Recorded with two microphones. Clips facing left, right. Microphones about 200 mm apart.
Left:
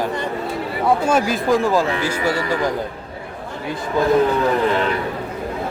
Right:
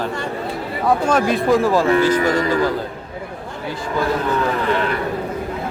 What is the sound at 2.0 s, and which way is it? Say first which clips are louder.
Speech: right 5 dB; 10° left (ahead or behind).